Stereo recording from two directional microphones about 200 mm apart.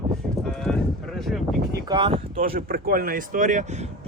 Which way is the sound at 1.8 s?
25° right (ahead or behind).